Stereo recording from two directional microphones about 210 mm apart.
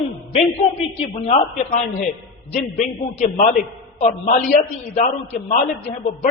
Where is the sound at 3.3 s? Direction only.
30° left (ahead or behind).